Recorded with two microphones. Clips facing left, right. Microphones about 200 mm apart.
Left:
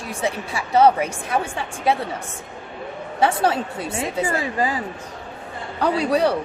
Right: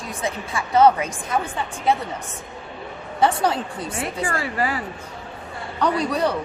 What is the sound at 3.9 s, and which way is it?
Speech, 20° left (ahead or behind).